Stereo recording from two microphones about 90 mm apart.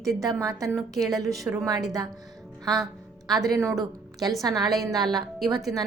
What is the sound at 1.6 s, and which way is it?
Speech, 40° right (ahead or behind).